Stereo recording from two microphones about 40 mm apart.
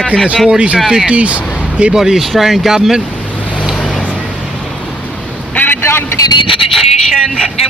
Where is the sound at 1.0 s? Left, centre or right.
Right.